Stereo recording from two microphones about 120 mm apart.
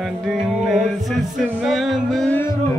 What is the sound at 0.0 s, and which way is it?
Music, 5° right (ahead or behind).